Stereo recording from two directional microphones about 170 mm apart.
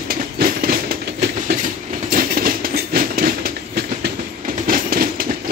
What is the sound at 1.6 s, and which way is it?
Train, 50° right (ahead or behind).